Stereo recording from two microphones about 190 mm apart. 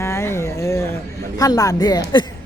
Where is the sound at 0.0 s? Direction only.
15° left (ahead or behind).